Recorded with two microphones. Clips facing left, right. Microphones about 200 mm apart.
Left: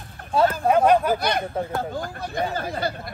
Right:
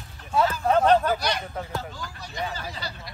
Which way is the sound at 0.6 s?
10° left (ahead or behind).